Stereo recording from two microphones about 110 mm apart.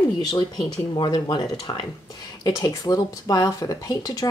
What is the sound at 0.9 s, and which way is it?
Speech, 45° left (ahead or behind).